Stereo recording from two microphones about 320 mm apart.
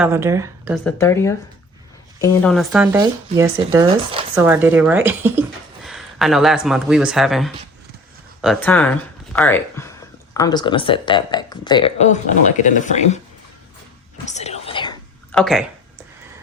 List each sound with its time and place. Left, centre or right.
0.0 s speech: centre
0.9 s speech: centre
4.4 s speech: centre; by 13.1 s left
14.3 s whispering: left
15.3 s speech: centre